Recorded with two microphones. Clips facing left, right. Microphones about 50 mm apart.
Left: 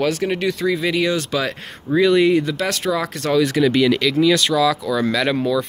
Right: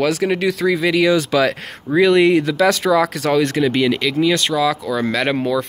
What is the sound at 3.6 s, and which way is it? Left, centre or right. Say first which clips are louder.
Speech: left 1 dB; right.